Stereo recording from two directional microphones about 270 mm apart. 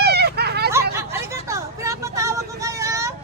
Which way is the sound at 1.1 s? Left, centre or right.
Centre.